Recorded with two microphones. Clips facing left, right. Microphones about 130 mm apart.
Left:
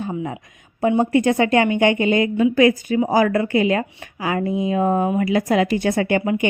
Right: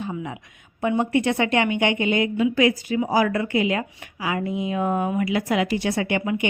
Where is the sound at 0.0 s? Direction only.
40° left (ahead or behind).